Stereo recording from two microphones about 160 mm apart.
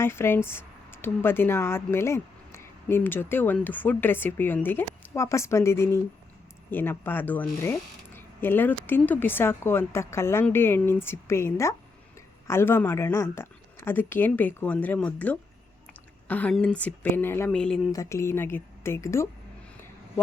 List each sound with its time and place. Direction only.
0.0 s speech: 15° left (ahead or behind)
17.9 s speech: 20° left (ahead or behind)